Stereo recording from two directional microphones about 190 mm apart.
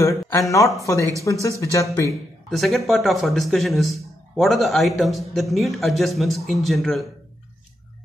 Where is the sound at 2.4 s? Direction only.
Centre (ahead or behind).